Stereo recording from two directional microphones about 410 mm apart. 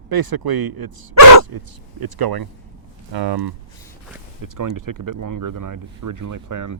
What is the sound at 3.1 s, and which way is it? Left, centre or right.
Speech, right.